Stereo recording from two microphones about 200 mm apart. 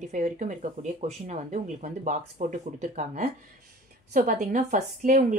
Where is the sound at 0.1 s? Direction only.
35° right (ahead or behind).